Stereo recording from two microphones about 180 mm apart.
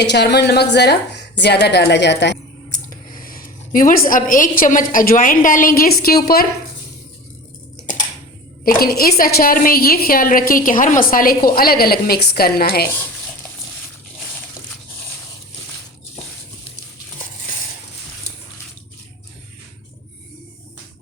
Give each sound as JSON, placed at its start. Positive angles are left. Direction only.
{"t": 0.0, "sound": "a woman's voice", "side_deg": 70}
{"t": 2.6, "sound": "a woman's voice", "side_deg": 45}
{"t": 8.6, "sound": "a woman's voice", "side_deg": 55}